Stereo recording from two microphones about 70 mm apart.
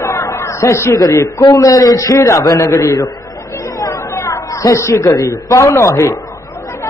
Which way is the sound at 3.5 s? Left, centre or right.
Left.